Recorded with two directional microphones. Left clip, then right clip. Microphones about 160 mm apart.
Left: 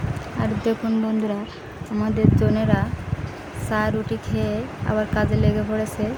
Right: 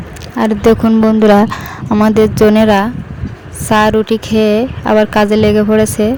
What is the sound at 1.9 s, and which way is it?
Speech, 75° right (ahead or behind).